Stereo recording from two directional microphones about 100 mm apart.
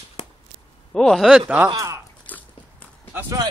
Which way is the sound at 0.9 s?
5° left (ahead or behind).